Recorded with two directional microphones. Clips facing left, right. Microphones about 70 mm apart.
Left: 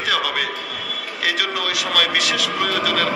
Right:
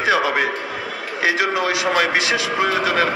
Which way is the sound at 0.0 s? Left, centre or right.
Right.